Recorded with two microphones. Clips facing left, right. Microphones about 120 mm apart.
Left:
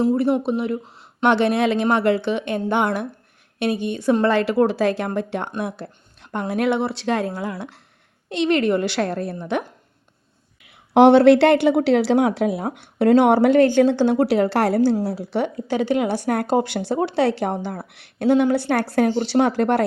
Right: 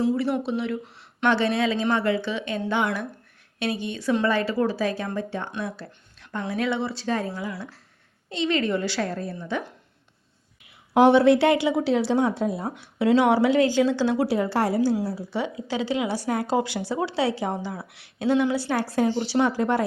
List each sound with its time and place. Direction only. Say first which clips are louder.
0.0 s a woman's voice: left 5 dB; 45° left (ahead or behind)
4.3 s speech: left 5 dB; 70° left (ahead or behind)
5.5 s a woman's voice: left 4 dB; 55° left (ahead or behind)
10.9 s speech: left 5 dB; 70° left (ahead or behind)
12.6 s speech: left 5 dB; 55° left (ahead or behind)
14.3 s a woman's voice: left 5 dB; 70° left (ahead or behind)